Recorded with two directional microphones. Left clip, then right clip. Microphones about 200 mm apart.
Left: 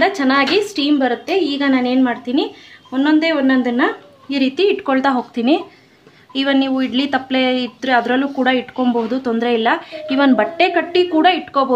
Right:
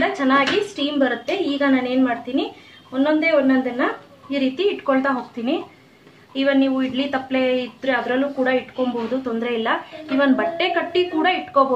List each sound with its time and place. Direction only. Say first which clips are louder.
0.0 s a woman's voice: left 3 dB; 50° left (ahead or behind)